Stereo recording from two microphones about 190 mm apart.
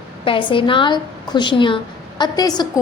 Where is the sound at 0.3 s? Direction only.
25° left (ahead or behind).